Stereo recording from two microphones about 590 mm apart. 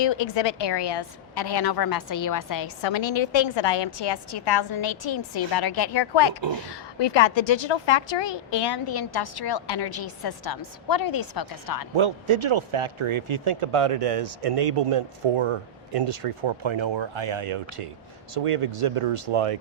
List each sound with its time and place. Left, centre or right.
0.0 s a woman's voice: left
2.8 s a woman's voice: left
11.9 s speech: right